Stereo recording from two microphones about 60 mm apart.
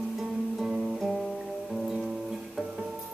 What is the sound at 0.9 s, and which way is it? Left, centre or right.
Music, centre.